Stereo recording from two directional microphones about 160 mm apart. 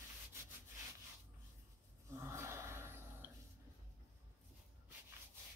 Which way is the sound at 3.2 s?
10° right (ahead or behind).